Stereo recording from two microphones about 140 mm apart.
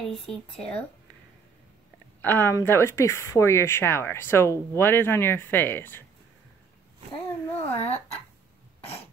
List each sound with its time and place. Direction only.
0.1 s speech: 5° left (ahead or behind)
2.2 s speech: 15° left (ahead or behind)
7.5 s speech: 50° left (ahead or behind)